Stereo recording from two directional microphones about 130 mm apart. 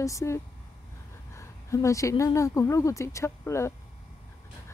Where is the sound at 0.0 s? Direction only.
25° left (ahead or behind).